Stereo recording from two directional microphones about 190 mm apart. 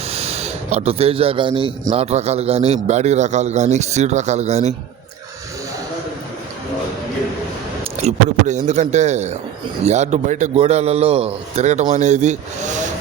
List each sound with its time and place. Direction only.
0.1 s a man's voice: 35° right (ahead or behind)
7.9 s a man's voice: 35° right (ahead or behind)